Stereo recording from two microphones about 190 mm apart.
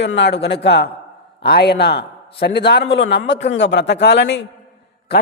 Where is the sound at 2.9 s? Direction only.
75° left (ahead or behind).